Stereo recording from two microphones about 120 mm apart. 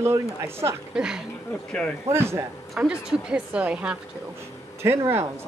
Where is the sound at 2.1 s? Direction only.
20° right (ahead or behind).